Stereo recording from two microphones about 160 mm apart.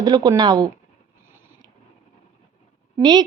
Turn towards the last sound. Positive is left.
turn(degrees=-25)  # may be behind; listen again after turning